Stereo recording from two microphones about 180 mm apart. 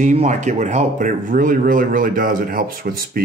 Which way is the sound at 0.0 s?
40° right (ahead or behind).